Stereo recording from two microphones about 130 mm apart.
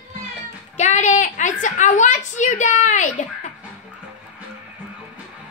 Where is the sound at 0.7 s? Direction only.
60° left (ahead or behind).